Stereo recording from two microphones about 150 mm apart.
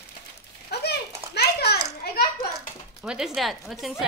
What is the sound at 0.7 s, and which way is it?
Children playing, 90° left.